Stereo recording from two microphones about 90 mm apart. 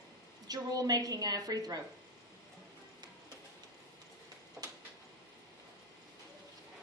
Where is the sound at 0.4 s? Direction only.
45° right (ahead or behind).